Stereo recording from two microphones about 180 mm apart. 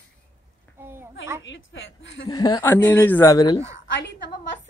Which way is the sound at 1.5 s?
90° left.